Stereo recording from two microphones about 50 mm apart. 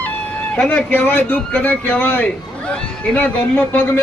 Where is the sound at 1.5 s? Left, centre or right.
Left.